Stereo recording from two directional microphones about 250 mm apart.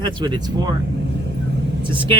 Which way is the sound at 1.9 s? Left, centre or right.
Right.